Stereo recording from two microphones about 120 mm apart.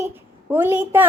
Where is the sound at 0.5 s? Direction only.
15° right (ahead or behind).